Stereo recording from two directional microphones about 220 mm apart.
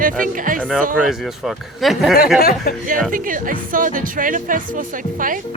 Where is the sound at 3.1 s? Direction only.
40° right (ahead or behind).